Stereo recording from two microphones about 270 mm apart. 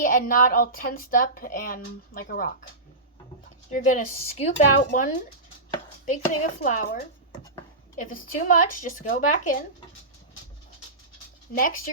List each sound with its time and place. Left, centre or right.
0.0 s a woman's voice: left
3.7 s speech: left
6.1 s speech: left